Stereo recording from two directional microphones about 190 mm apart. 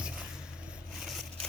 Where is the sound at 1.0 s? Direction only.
Centre (ahead or behind).